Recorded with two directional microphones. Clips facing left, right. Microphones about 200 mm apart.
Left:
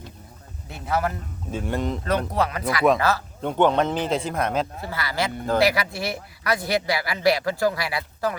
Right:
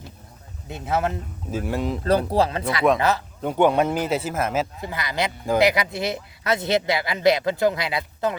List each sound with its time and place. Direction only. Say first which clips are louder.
0.7 s speech: right 1 dB; 25° right (ahead or behind)
1.5 s speech: right 1 dB; 5° right (ahead or behind)
2.3 s speech: right 3 dB; 30° right (ahead or behind)
3.4 s a man's voice: right 1 dB; 10° right (ahead or behind)
4.8 s speech: right 1 dB; 20° right (ahead or behind)